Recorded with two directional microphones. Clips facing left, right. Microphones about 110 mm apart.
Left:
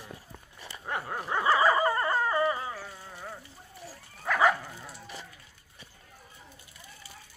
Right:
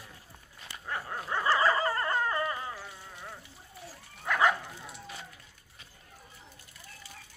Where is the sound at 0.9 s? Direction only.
20° left (ahead or behind).